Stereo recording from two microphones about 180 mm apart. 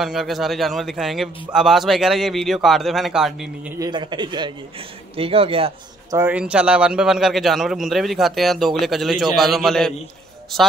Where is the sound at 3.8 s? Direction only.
25° right (ahead or behind).